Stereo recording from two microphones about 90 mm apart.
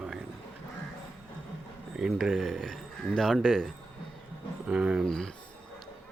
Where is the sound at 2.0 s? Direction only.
5° right (ahead or behind).